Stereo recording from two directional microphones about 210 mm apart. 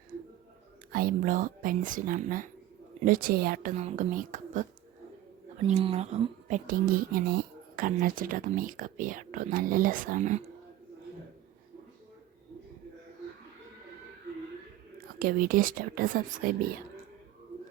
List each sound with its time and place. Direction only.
0.9 s speech: 40° right (ahead or behind)
5.6 s speech: 30° right (ahead or behind)
15.0 s speech: 45° right (ahead or behind)